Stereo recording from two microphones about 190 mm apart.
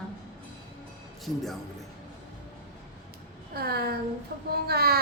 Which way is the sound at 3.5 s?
55° right (ahead or behind).